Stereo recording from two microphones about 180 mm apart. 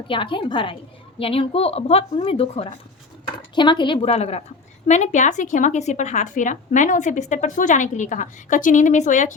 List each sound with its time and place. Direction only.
0.1 s a woman's voice: 30° left (ahead or behind); by 9.3 s 45° left (ahead or behind)